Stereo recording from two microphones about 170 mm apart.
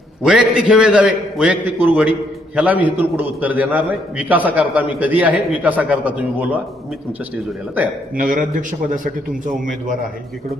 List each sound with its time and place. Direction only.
0.2 s a man's voice: 5° right (ahead or behind)
8.1 s a man's voice: 55° right (ahead or behind)